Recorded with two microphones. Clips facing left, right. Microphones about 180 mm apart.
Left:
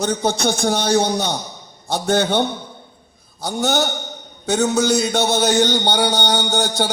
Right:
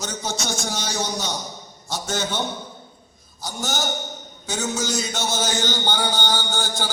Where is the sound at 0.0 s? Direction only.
60° left (ahead or behind).